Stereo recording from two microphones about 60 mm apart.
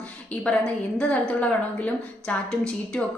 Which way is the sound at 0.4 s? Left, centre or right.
Centre.